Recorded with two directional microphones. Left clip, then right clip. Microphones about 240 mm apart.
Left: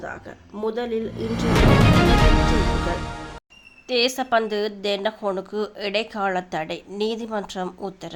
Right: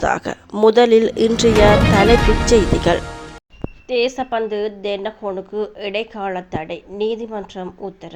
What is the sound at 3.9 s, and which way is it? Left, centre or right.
A woman's voice, centre.